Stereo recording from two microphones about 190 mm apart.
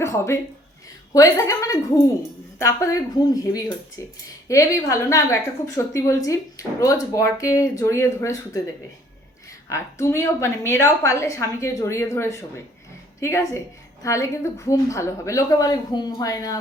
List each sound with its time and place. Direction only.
0.0 s a woman's voice: 15° left (ahead or behind)
9.6 s a woman's voice: 15° left (ahead or behind)